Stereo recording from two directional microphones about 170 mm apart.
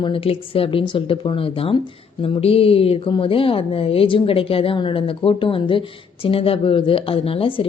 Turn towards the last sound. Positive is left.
turn(degrees=35)  # may be behind; listen again after turning